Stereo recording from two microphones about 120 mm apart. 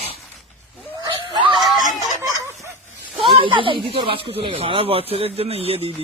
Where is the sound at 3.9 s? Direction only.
50° right (ahead or behind).